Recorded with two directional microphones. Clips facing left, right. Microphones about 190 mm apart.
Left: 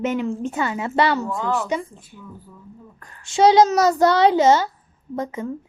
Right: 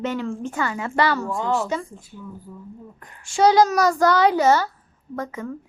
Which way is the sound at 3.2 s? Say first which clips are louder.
Left 2 dB; 20° left (ahead or behind).